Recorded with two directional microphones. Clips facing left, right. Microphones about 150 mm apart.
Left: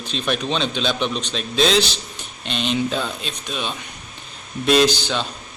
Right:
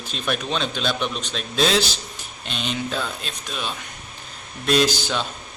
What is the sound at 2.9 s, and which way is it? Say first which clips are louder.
Speech: left 3 dB; centre (ahead or behind).